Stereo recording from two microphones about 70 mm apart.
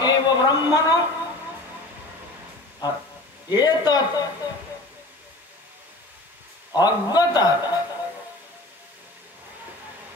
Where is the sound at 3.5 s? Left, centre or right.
Left.